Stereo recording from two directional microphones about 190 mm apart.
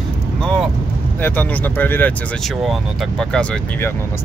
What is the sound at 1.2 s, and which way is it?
Speech, 10° left (ahead or behind).